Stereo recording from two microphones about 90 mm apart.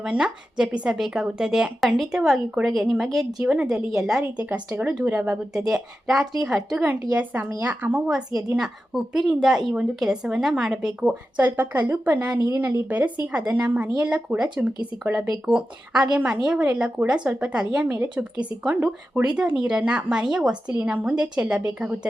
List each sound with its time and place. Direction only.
0.0 s a woman's voice: 10° right (ahead or behind)
4.4 s a woman's voice: 20° right (ahead or behind)
7.1 s a woman's voice: 15° right (ahead or behind)
8.4 s a woman's voice: 5° right (ahead or behind)
11.3 s a woman's voice: 20° right (ahead or behind)